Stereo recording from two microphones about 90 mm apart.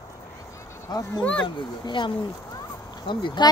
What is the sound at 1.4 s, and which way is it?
Speech, 60° left (ahead or behind).